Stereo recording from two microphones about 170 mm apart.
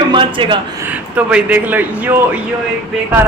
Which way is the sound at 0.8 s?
10° right (ahead or behind).